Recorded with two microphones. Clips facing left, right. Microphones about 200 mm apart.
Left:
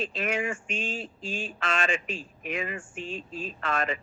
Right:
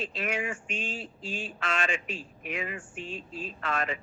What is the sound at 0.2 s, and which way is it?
Speech, 45° left (ahead or behind).